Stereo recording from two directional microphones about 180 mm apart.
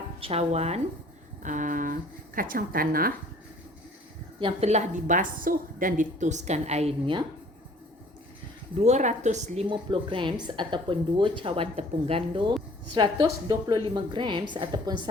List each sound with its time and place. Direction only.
0.2 s a woman's voice: 35° right (ahead or behind); by 3.1 s 55° right (ahead or behind)
4.4 s a woman's voice: 35° right (ahead or behind)
8.8 s a woman's voice: 40° right (ahead or behind)
9.6 s speech: 25° right (ahead or behind)